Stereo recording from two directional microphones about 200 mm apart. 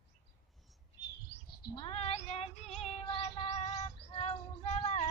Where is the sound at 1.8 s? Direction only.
25° left (ahead or behind).